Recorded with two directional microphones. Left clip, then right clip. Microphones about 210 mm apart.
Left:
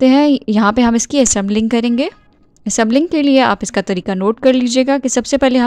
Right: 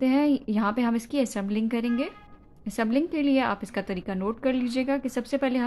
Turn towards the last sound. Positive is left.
turn(degrees=40)  # may be behind; listen again after turning